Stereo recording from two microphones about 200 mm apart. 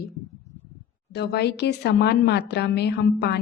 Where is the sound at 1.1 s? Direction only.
55° left (ahead or behind).